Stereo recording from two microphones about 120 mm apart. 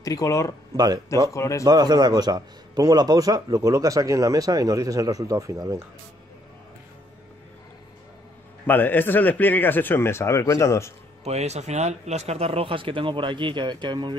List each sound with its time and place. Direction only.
0.0 s speech: 30° left (ahead or behind)
0.7 s speech: 35° right (ahead or behind)
1.3 s speech: 25° left (ahead or behind)
1.6 s a man's voice: 35° right (ahead or behind)
8.6 s speech: 15° left (ahead or behind)
11.2 s speech: 65° right (ahead or behind); by 14.1 s 40° right (ahead or behind)